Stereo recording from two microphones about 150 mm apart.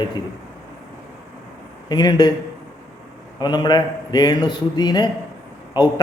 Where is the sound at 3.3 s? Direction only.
30° left (ahead or behind).